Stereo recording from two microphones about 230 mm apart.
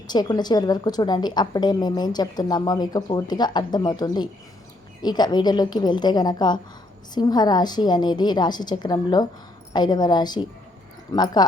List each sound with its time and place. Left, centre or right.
0.1 s a woman's voice: centre